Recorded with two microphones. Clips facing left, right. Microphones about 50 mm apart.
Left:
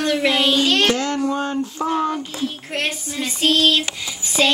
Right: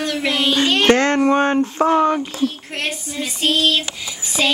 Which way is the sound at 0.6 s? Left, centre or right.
Centre.